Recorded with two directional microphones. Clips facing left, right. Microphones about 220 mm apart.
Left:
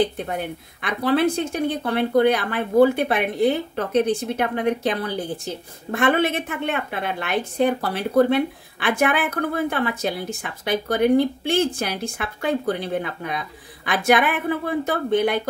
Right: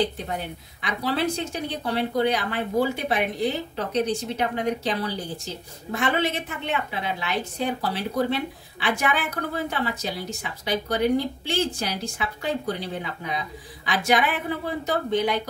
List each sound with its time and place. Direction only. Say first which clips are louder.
0.0 s speech: left 4 dB; 55° left (ahead or behind)